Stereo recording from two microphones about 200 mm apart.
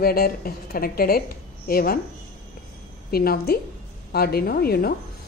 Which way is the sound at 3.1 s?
50° left (ahead or behind).